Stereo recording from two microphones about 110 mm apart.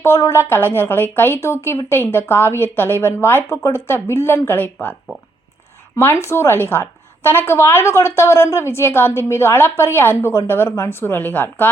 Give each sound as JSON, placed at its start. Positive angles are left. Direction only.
{"t": 0.0, "sound": "a woman's voice", "side_deg": 25}
{"t": 6.0, "sound": "a woman's voice", "side_deg": 20}